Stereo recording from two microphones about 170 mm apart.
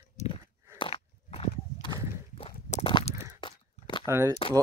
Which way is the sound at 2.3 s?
35° left (ahead or behind).